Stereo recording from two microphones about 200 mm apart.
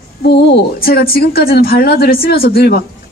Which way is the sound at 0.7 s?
45° left (ahead or behind).